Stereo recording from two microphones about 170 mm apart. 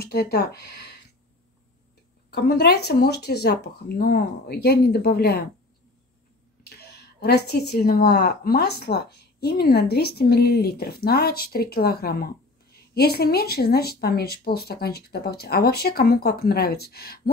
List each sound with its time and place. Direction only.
0.0 s speech: 70° left (ahead or behind)
2.3 s speech: 70° left (ahead or behind)
6.6 s speech: 70° left (ahead or behind)